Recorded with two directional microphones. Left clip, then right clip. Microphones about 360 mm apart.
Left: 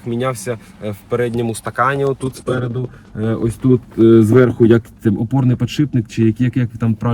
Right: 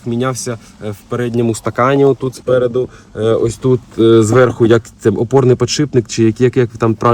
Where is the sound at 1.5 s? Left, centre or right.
Centre.